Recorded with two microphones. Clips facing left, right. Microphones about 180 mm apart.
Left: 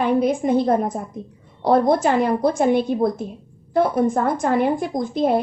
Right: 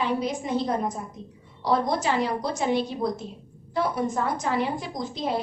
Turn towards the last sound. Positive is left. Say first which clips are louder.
# left 9 dB
turn(degrees=55)  # may be behind; listen again after turning